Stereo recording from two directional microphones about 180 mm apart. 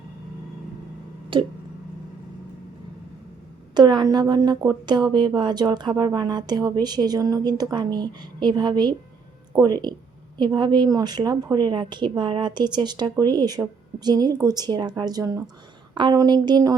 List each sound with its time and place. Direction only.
1.3 s speech: 25° right (ahead or behind)
3.8 s speech: 25° right (ahead or behind)